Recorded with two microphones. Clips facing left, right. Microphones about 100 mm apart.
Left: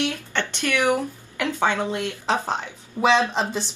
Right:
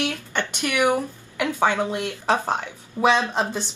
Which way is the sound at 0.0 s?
15° right (ahead or behind).